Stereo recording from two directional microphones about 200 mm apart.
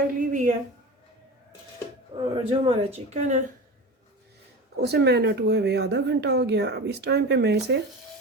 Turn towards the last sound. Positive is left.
turn(degrees=-55)  # may be behind; listen again after turning